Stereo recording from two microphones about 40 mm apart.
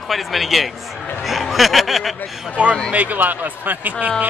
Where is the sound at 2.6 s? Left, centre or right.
Right.